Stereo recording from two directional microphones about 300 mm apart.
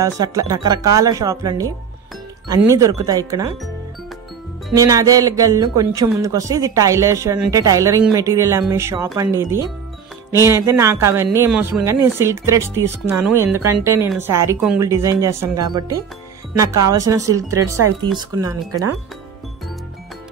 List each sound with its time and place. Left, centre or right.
0.0 s speech: centre
4.7 s speech: centre
13.5 s speech: right
13.8 s speech: centre